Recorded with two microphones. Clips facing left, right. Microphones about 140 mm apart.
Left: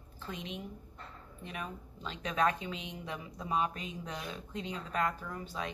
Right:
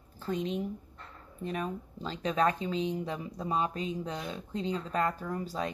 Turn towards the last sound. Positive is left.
turn(degrees=-40)  # may be behind; listen again after turning